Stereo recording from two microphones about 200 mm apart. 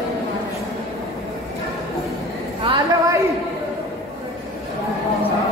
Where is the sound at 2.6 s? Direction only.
25° right (ahead or behind).